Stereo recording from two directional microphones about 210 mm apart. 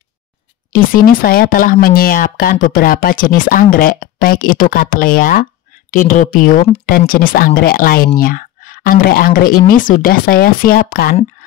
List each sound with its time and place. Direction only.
0.7 s speech: 40° left (ahead or behind)